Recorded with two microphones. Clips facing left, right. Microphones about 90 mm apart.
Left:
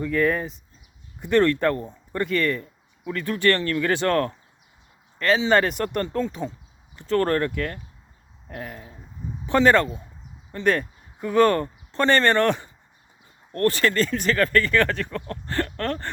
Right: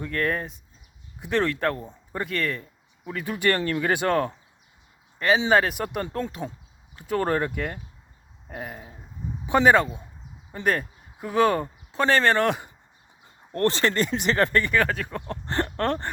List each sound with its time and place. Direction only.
0.0 s speech: centre (ahead or behind)
13.5 s speech: 25° right (ahead or behind); by 15.2 s 10° right (ahead or behind)
15.3 s speech: 20° right (ahead or behind)